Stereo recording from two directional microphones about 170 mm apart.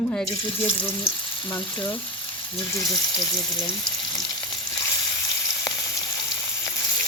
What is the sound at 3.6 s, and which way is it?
Water, 25° left (ahead or behind).